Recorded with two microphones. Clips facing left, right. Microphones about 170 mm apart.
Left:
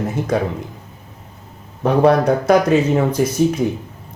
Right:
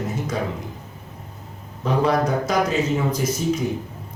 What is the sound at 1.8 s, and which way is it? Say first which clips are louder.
Speech: left 7 dB; 60° left (ahead or behind).